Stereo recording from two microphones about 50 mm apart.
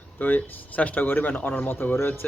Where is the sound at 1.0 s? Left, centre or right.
Left.